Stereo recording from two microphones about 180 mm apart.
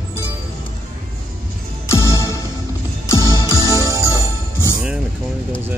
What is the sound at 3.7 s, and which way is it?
Jingle bell, 20° right (ahead or behind).